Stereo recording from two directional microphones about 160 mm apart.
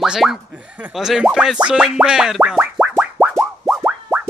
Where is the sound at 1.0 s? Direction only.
5° right (ahead or behind).